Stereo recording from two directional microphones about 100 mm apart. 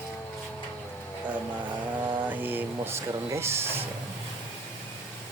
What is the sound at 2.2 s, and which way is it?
Speech, 20° right (ahead or behind).